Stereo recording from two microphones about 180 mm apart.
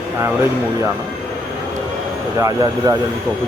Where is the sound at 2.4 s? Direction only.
20° right (ahead or behind).